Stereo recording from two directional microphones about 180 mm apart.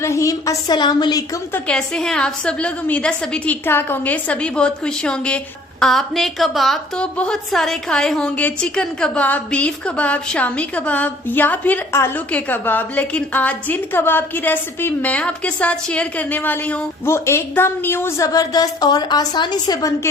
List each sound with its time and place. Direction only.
0.0 s a woman's voice: 15° left (ahead or behind)
1.5 s a woman's voice: 5° left (ahead or behind); by 19.9 s 20° left (ahead or behind)